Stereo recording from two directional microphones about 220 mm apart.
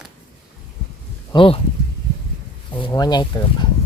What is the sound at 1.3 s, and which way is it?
Speech, 25° left (ahead or behind).